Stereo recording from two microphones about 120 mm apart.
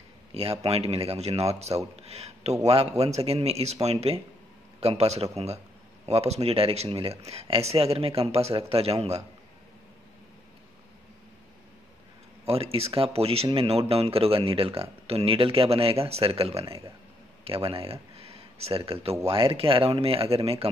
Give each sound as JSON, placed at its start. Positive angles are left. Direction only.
{"t": 0.3, "sound": "a sound", "side_deg": -55}
{"t": 0.7, "sound": "speech", "side_deg": -60}
{"t": 12.4, "sound": "speech", "side_deg": -55}